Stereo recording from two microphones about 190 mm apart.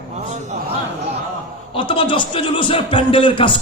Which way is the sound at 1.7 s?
25° left (ahead or behind).